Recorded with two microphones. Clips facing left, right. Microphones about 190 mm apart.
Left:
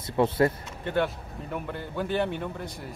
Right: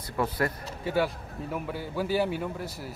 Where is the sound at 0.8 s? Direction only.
5° right (ahead or behind).